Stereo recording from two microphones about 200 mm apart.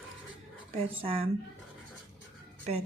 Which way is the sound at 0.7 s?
30° right (ahead or behind).